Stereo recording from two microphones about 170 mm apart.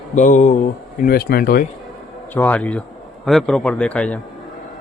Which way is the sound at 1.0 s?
65° left (ahead or behind).